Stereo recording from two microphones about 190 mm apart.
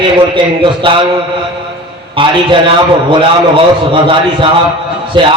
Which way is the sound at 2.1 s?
25° right (ahead or behind).